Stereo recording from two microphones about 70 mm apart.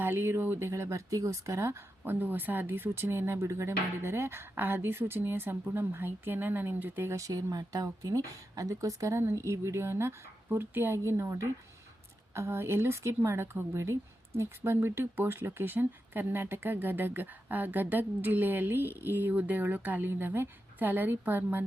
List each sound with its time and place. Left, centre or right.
0.0 s speech: right
0.7 s speech: right
7.2 s speech: right